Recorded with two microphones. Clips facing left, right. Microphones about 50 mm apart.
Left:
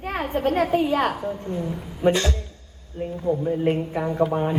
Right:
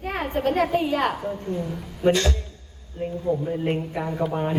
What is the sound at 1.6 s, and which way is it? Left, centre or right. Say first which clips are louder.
Speech: left 1 dB; centre.